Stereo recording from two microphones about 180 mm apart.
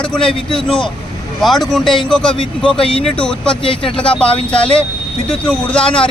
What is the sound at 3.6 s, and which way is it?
Speech, 30° left (ahead or behind).